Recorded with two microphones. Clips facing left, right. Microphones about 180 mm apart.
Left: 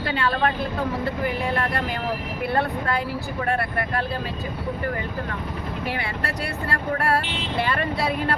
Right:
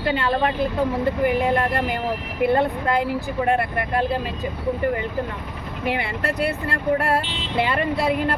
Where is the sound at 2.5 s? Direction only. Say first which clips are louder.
Right 3 dB; 20° right (ahead or behind).